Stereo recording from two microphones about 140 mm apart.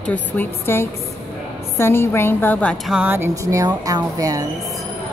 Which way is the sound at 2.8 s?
10° right (ahead or behind).